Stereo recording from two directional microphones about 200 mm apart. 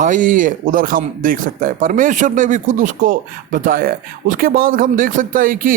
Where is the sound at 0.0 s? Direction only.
40° right (ahead or behind).